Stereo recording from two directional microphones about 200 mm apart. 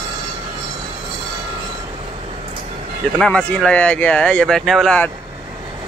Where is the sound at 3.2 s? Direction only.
5° left (ahead or behind).